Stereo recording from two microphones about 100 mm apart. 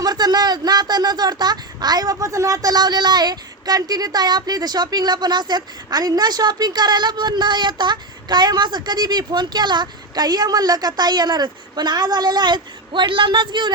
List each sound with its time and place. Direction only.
0.0 s speech: 45° right (ahead or behind)